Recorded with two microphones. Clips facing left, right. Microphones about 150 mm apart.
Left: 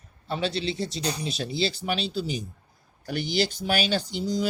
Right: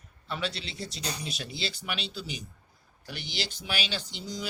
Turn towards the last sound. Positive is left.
turn(degrees=40)  # may be behind; listen again after turning